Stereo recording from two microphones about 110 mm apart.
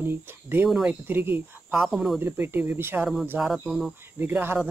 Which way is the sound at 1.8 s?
Centre (ahead or behind).